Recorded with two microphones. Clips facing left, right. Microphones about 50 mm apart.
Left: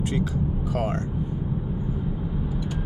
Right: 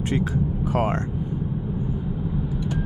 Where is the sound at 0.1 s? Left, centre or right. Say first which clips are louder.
Right 2 dB; right.